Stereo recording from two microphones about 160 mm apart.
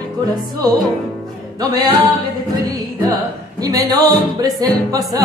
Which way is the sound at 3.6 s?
25° right (ahead or behind).